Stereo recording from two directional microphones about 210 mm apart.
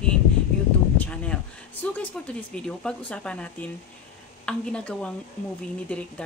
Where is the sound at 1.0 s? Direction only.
5° left (ahead or behind).